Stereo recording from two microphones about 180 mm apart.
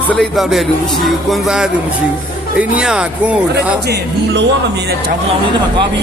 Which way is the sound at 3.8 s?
70° right (ahead or behind).